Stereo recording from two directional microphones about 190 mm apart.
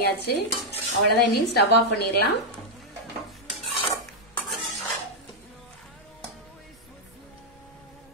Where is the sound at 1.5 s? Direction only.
60° left (ahead or behind).